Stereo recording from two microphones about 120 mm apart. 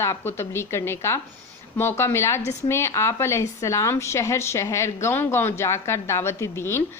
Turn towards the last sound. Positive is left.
turn(degrees=20)  # may be behind; listen again after turning